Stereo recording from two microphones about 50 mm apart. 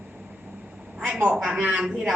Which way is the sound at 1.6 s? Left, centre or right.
Right.